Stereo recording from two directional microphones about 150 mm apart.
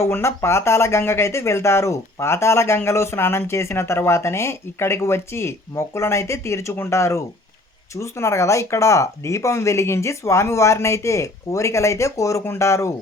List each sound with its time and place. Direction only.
0.0 s speech: 20° left (ahead or behind)